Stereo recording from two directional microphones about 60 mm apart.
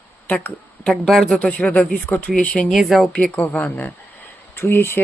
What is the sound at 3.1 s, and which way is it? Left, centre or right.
Speech, left.